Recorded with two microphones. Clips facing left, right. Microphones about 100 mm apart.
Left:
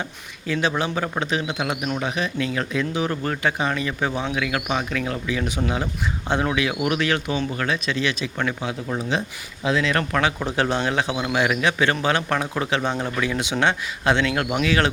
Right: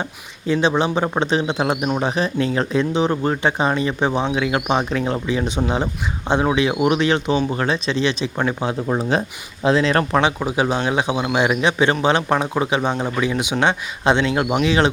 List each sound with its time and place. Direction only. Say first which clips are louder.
0.0 s speech: right 5 dB; 25° right (ahead or behind)
10.4 s a man's voice: right 3 dB; 15° right (ahead or behind)